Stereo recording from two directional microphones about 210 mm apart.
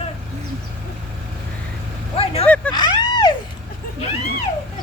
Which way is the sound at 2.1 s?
30° left (ahead or behind).